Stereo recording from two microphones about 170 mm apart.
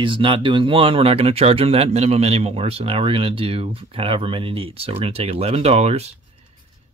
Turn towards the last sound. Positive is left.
turn(degrees=-40)  # may be behind; listen again after turning